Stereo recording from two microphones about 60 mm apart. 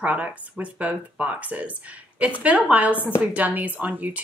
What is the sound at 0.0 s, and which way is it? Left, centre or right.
A woman's voice, right.